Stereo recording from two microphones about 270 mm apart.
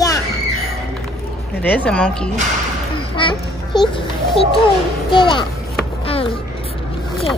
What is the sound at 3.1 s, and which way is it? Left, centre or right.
A child's voice, centre.